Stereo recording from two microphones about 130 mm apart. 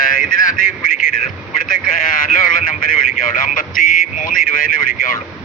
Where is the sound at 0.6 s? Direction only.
90° left.